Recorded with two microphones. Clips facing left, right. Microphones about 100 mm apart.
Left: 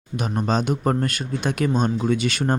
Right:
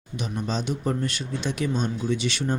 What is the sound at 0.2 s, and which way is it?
Speech, 50° left (ahead or behind).